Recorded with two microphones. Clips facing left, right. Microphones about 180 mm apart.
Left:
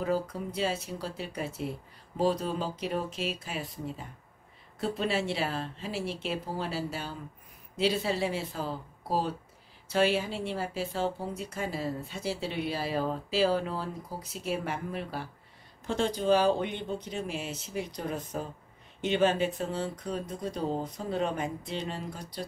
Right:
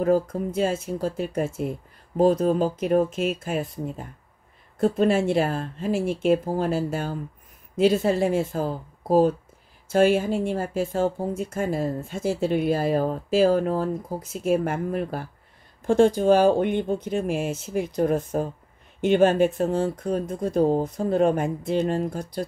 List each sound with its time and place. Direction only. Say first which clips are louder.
0.0 s speech: right 9 dB; 50° right (ahead or behind)